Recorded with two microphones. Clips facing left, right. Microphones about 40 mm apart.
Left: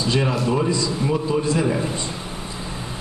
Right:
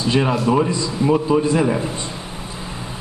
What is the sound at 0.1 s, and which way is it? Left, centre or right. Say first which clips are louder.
A man's voice: right 5 dB; centre.